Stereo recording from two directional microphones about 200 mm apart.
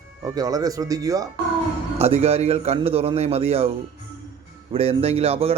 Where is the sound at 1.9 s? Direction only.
30° right (ahead or behind).